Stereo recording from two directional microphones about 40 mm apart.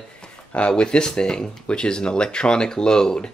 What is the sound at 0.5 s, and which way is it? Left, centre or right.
Speech, left.